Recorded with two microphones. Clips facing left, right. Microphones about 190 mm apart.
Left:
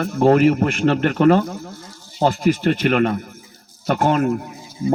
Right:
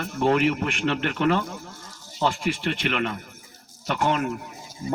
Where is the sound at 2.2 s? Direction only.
40° left (ahead or behind).